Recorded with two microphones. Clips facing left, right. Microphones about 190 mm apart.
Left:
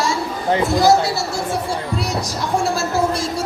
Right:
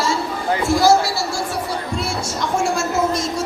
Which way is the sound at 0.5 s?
20° left (ahead or behind).